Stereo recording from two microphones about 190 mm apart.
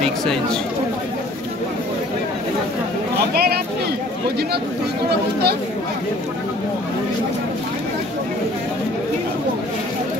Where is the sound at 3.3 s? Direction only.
55° right (ahead or behind).